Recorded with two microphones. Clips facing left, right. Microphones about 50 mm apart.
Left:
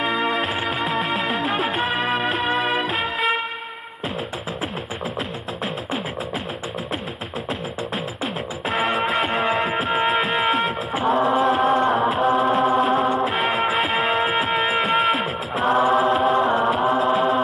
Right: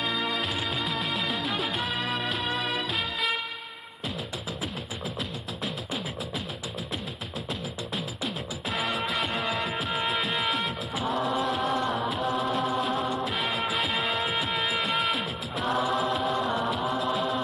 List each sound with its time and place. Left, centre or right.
0.0 s music: left
0.4 s music: left
1.6 s music: left
8.6 s music: left
11.3 s chant: left
11.7 s music: left
12.0 s music: left
16.3 s chant: left
16.9 s music: left